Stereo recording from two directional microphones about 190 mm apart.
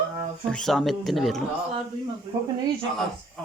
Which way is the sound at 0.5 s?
Centre (ahead or behind).